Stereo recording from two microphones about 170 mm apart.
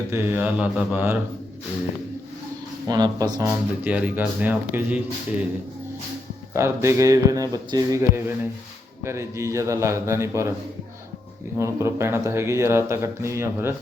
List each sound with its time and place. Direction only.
0.1 s speech: 10° right (ahead or behind)
2.8 s speech: 20° right (ahead or behind)
6.5 s speech: 15° right (ahead or behind)
11.5 s speech: 15° right (ahead or behind)